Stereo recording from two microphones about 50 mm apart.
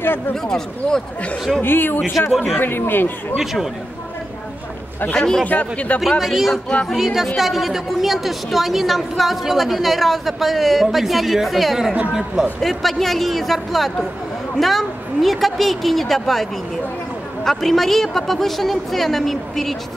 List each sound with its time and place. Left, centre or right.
0.3 s speech: centre
1.6 s speech: left
2.3 s a woman's voice: centre
2.6 s speech: left
5.1 s speech: centre
5.5 s speech: left
5.9 s a woman's voice: centre
12.6 s a woman's voice: centre
17.5 s a woman's voice: centre